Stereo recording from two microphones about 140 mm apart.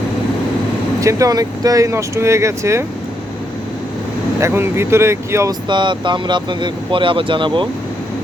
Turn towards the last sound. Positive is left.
turn(degrees=-35)  # may be behind; listen again after turning